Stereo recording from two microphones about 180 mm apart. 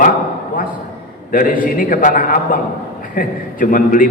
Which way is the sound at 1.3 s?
50° left (ahead or behind).